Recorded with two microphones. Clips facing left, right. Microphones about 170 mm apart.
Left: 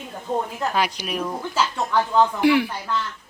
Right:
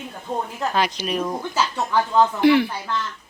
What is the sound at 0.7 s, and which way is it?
Speech, 10° left (ahead or behind).